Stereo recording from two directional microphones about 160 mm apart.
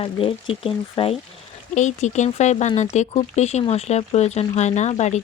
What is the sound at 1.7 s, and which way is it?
Speech, 50° left (ahead or behind).